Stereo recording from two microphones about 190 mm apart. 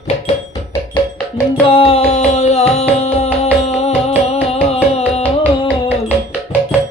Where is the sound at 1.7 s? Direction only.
30° left (ahead or behind).